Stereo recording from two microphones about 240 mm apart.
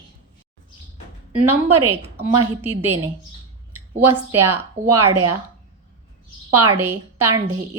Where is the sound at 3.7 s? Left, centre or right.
Right.